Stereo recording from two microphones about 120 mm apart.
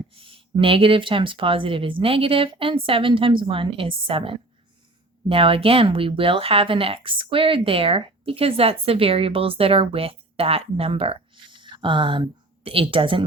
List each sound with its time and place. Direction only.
0.1 s speech: 50° right (ahead or behind)